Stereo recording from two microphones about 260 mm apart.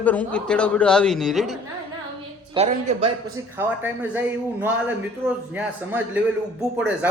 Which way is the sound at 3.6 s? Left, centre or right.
Centre.